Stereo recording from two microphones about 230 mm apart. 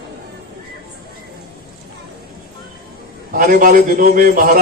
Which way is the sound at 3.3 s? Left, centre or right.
Right.